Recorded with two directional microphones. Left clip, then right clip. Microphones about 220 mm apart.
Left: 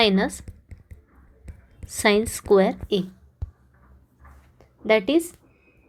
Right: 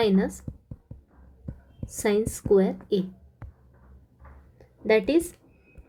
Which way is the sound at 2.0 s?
10° left (ahead or behind).